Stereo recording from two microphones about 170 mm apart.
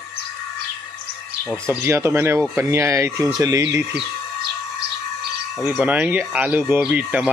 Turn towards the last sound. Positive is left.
turn(degrees=-5)  # may be behind; listen again after turning